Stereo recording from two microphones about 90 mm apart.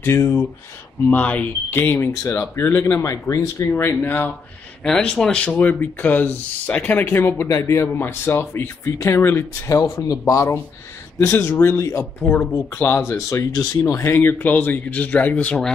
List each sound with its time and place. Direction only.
0.0 s speech: 30° left (ahead or behind)
1.0 s speech: 15° left (ahead or behind); by 3.6 s 35° left (ahead or behind)
3.7 s speech: 25° left (ahead or behind)
4.8 s speech: 5° left (ahead or behind); by 12.1 s 30° left (ahead or behind)
12.2 s speech: 20° left (ahead or behind)
13.5 s speech: 45° left (ahead or behind)
14.0 s speech: 20° left (ahead or behind)